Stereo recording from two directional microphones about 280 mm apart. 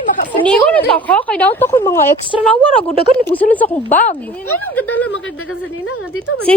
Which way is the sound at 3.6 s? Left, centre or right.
Left.